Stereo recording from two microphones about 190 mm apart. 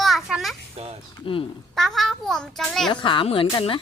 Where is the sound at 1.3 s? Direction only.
30° left (ahead or behind).